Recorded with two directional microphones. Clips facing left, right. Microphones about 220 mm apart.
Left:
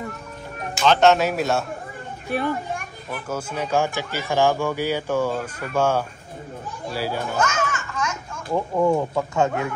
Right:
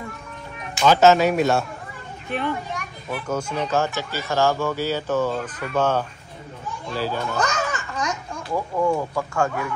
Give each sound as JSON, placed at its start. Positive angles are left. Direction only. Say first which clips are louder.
{"t": 0.8, "sound": "speech", "louder": "right 2 dB", "side_deg": -5}
{"t": 2.4, "sound": "a child's voice", "louder": "left 1 dB", "side_deg": 50}
{"t": 3.3, "sound": "speech", "louder": "right 1 dB", "side_deg": 5}
{"t": 7.3, "sound": "a sound", "louder": "left 1 dB", "side_deg": -35}
{"t": 8.5, "sound": "speech", "louder": "left 2 dB", "side_deg": 25}